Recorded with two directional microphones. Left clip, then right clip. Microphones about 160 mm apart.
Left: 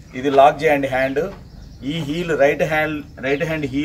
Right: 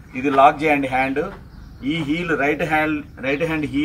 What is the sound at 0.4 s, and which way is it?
A man's voice, 15° left (ahead or behind).